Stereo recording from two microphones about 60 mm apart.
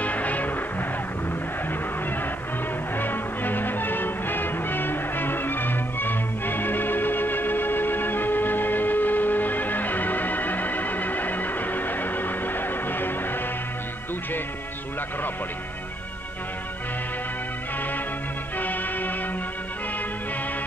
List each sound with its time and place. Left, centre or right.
0.0 s music: left
3.0 s music: left
18.6 s music: left